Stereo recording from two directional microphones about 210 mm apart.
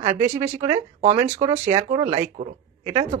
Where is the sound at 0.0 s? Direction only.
35° right (ahead or behind).